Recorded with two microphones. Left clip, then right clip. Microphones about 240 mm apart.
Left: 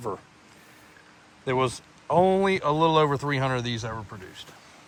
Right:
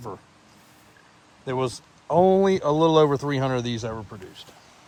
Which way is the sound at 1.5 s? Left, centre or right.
Centre.